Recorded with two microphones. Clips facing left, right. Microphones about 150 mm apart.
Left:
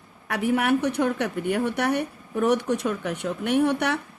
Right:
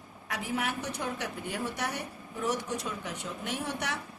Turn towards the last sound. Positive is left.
turn(degrees=60)  # may be behind; listen again after turning